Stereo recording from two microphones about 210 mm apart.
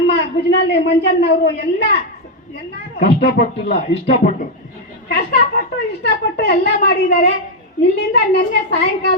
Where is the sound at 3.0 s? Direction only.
50° left (ahead or behind).